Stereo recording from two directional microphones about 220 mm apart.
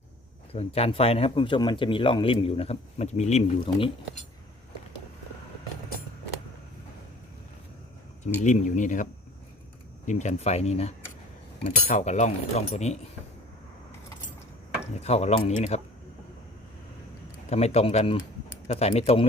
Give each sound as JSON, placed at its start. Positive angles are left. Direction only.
{"t": 0.5, "sound": "speech", "side_deg": 25}
{"t": 8.4, "sound": "speech", "side_deg": 35}
{"t": 10.1, "sound": "speech", "side_deg": 30}
{"t": 14.9, "sound": "speech", "side_deg": 30}
{"t": 17.5, "sound": "speech", "side_deg": 30}